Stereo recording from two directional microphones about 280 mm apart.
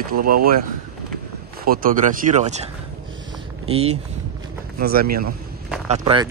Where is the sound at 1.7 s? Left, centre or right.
Right.